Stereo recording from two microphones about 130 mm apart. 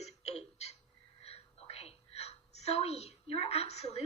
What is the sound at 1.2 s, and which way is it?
A woman's voice, 50° left (ahead or behind).